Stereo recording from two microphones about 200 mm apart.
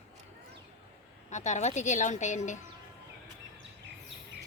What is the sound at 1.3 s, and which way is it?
A woman's voice, 35° left (ahead or behind).